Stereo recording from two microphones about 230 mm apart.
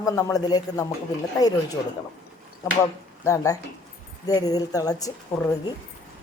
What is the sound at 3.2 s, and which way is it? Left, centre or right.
A woman's voice, centre.